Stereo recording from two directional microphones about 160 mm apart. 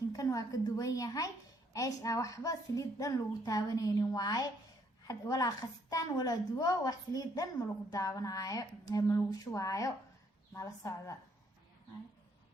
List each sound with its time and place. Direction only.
0.1 s a woman's voice: 20° left (ahead or behind)